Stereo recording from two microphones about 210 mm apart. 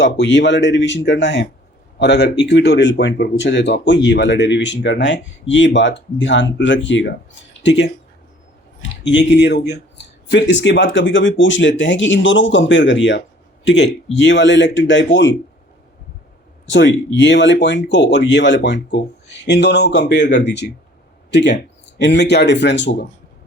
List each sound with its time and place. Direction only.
0.0 s speech: 60° left (ahead or behind)
9.0 s speech: 55° left (ahead or behind)
16.6 s speech: 60° left (ahead or behind)